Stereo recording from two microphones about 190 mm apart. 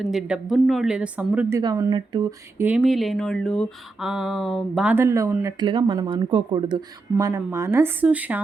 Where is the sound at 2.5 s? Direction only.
10° right (ahead or behind).